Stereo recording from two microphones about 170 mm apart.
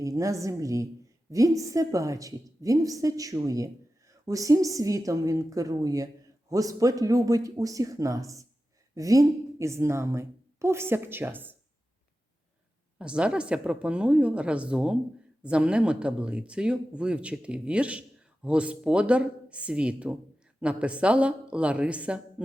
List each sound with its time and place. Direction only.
0.0 s a woman's voice: 20° right (ahead or behind)
13.0 s speech: 5° right (ahead or behind)